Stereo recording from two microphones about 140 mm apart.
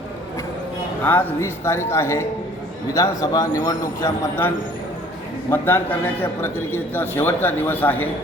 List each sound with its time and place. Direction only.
1.0 s a man's voice: 15° left (ahead or behind)